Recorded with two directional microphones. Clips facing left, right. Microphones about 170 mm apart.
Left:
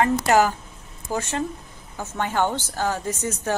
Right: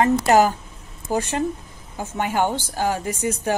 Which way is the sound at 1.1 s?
15° right (ahead or behind).